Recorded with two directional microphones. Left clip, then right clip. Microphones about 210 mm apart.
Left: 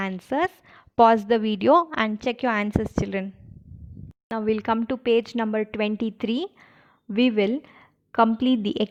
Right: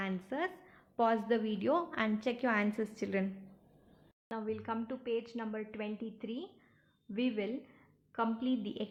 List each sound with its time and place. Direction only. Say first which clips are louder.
0.0 s a woman's voice: left 12 dB; 55° left (ahead or behind)
4.4 s a woman's voice: left 15 dB; 45° left (ahead or behind)